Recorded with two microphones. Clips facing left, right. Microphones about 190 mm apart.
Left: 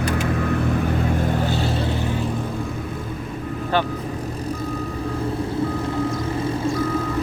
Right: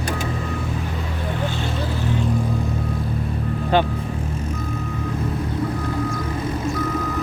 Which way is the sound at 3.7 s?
20° right (ahead or behind).